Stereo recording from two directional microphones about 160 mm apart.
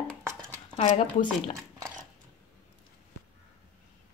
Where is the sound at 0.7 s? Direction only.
40° left (ahead or behind).